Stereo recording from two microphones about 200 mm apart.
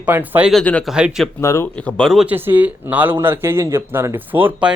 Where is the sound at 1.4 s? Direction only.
15° left (ahead or behind).